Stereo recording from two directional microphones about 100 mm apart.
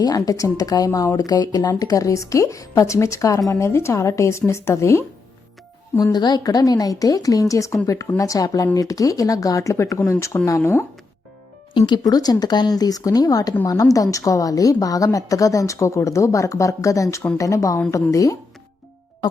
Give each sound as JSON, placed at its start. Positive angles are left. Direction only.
{"t": 0.0, "sound": "speech", "side_deg": 40}
{"t": 6.0, "sound": "speech", "side_deg": 45}
{"t": 12.0, "sound": "speech", "side_deg": 40}